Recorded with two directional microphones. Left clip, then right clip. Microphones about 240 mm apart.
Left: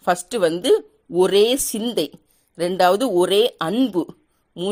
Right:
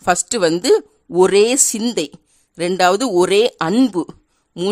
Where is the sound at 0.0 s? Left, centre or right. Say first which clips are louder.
Right 3 dB; centre.